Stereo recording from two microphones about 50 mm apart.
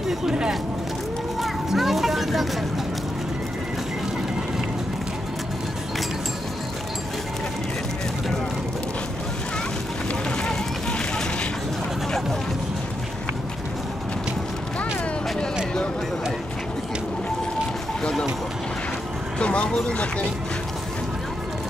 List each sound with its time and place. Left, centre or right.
0.3 s speech: centre
1.4 s music: centre
10.3 s a sound: centre
19.3 s vehicle: left